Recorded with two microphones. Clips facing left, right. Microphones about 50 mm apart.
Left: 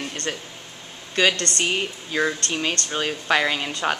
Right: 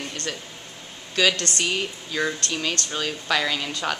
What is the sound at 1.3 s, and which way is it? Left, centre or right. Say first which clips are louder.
Speech: left 1 dB; centre.